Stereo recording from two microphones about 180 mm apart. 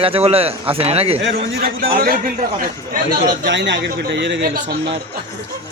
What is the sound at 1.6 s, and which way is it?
Speech, 55° right (ahead or behind).